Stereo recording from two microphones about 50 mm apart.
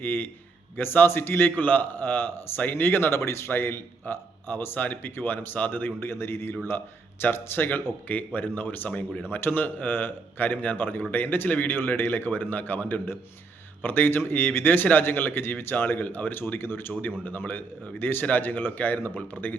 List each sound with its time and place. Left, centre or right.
0.0 s a man's voice: left
3.5 s a man's voice: left
4.0 s a man's voice: left
6.1 s a man's voice: left